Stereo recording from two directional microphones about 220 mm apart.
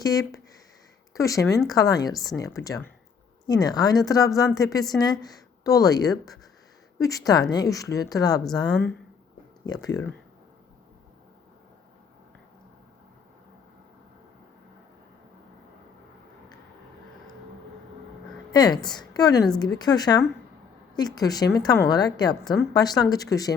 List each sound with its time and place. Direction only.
0.0 s a woman's voice: 15° left (ahead or behind)
9.6 s a woman's voice: 15° left (ahead or behind)
18.5 s a woman's voice: 20° left (ahead or behind)